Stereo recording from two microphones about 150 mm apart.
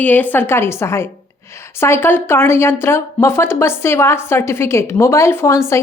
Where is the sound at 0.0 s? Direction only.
10° left (ahead or behind).